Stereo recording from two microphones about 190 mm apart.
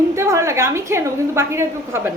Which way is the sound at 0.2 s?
15° right (ahead or behind).